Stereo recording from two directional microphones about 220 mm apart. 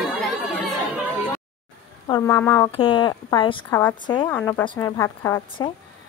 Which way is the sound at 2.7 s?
25° left (ahead or behind).